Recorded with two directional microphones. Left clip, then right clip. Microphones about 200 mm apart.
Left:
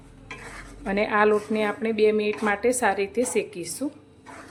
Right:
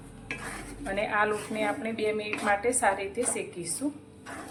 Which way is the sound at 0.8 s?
45° left (ahead or behind).